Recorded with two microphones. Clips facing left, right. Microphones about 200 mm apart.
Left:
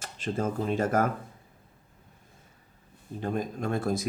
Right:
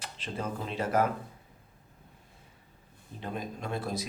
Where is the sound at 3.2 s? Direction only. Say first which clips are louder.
Left 6 dB; 45° left (ahead or behind).